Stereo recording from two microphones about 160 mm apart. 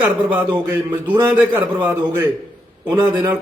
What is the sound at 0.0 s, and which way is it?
A man's voice, 10° right (ahead or behind).